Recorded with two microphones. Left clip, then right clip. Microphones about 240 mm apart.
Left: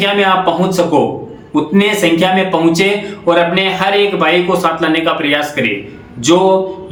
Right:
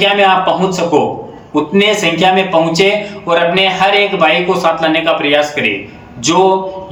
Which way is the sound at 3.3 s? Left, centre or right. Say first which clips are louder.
Right 1 dB; centre.